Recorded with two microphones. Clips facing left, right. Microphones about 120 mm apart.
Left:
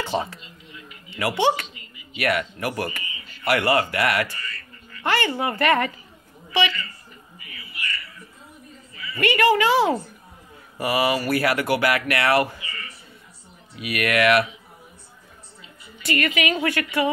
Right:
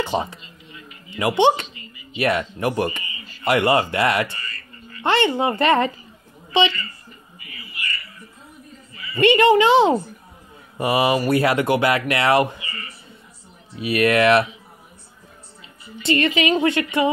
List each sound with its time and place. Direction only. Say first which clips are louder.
0.0 s speech: right 3 dB; 15° right (ahead or behind)
9.1 s speech: right 5 dB; 25° right (ahead or behind)
13.7 s speech: right 5 dB; 30° right (ahead or behind)
16.0 s speech: right 4 dB; 25° right (ahead or behind)